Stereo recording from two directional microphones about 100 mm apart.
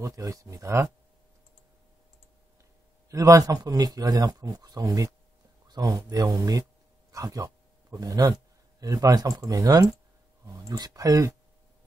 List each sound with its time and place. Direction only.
0.0 s speech: 35° right (ahead or behind)
3.1 s a man's voice: 35° right (ahead or behind)